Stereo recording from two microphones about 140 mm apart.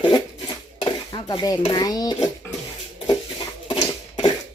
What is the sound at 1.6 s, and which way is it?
Speech, 30° left (ahead or behind).